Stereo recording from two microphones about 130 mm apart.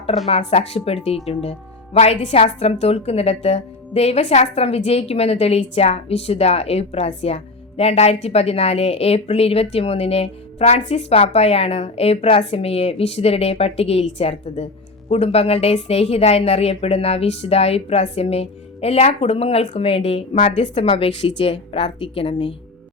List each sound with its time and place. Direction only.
0.3 s speech: 50° left (ahead or behind)